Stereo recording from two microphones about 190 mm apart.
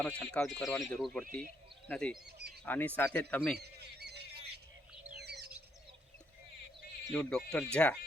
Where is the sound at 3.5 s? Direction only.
60° right (ahead or behind).